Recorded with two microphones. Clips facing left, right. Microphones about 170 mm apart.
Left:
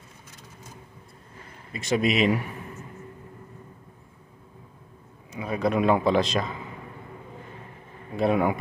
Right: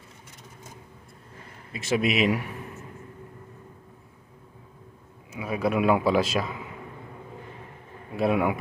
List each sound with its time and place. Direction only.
1.7 s a man's voice: 5° right (ahead or behind)
5.3 s a man's voice: 5° right (ahead or behind)
8.2 s a man's voice: 5° right (ahead or behind)